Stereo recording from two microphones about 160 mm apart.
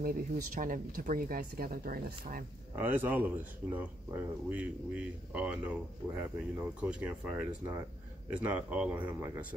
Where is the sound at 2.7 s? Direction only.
10° right (ahead or behind).